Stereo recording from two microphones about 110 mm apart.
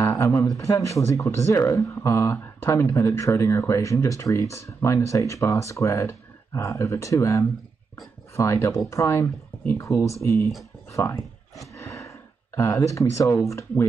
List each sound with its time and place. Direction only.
0.2 s speech: 25° left (ahead or behind)